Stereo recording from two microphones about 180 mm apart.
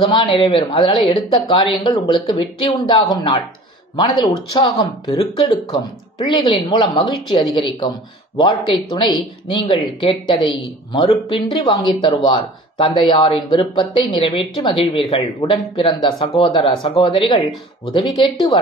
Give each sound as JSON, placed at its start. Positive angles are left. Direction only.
{"t": 0.0, "sound": "speech", "side_deg": 30}